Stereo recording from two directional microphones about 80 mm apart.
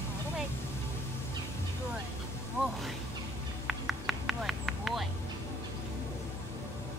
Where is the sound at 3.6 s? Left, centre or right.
Centre.